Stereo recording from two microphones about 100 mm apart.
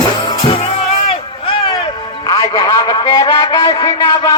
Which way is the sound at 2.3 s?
40° left (ahead or behind).